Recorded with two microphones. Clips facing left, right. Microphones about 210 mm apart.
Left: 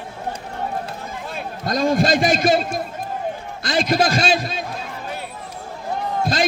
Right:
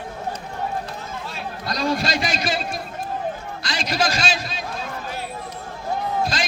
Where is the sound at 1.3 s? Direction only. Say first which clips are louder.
Left 7 dB; 50° left (ahead or behind).